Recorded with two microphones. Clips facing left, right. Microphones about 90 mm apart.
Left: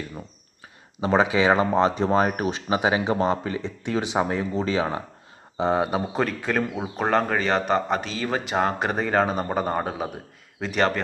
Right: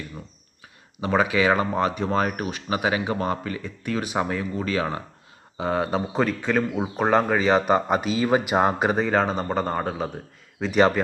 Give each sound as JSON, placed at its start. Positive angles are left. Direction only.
{"t": 1.0, "sound": "speech", "side_deg": 25}
{"t": 5.9, "sound": "speech", "side_deg": 0}